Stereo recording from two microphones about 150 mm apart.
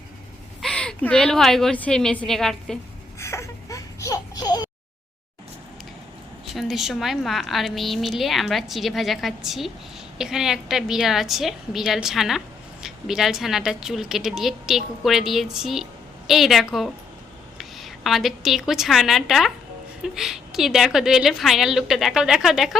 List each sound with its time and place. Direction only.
0.6 s a woman's voice: 5° left (ahead or behind)
3.2 s baby cry: 20° left (ahead or behind)
6.4 s a woman's voice: centre (ahead or behind)